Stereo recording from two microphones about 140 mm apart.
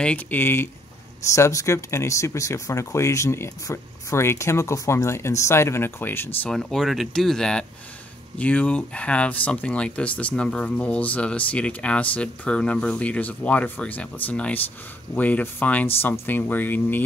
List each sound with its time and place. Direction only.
0.0 s speech: 10° left (ahead or behind)
6.5 s speech: 5° left (ahead or behind)